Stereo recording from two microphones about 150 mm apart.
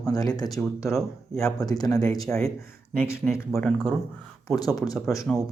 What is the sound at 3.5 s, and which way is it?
Speech, centre (ahead or behind).